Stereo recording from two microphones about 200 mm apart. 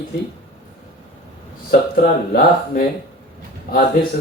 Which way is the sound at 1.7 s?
50° left (ahead or behind).